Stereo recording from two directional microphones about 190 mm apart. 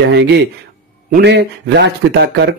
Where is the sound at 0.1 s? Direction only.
65° right (ahead or behind).